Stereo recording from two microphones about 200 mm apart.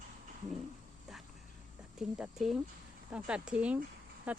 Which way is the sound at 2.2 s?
Centre (ahead or behind).